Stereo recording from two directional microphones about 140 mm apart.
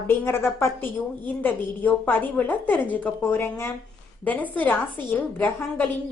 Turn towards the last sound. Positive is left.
turn(degrees=15)  # may be behind; listen again after turning